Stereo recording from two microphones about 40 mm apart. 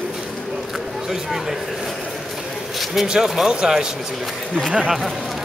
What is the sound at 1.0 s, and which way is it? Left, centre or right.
Speech, centre.